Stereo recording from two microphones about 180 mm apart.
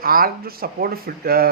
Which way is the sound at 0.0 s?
55° right (ahead or behind).